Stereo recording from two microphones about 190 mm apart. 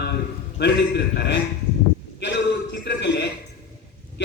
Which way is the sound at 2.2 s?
65° left (ahead or behind).